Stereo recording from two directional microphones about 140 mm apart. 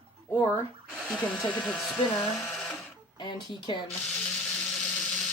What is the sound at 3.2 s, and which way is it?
Speech, 30° left (ahead or behind).